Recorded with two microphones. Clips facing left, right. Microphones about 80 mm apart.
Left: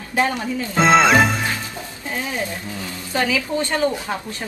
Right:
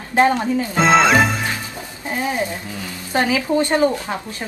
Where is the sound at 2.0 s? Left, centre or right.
Right.